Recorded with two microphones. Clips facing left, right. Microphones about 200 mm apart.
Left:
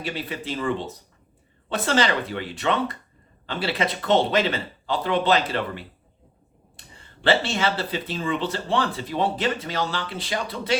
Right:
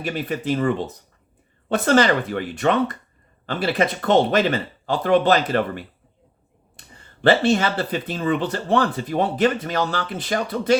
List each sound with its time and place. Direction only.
0.0 s speech: 45° right (ahead or behind)